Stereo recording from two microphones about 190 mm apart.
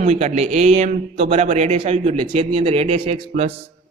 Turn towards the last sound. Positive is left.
turn(degrees=-25)  # may be behind; listen again after turning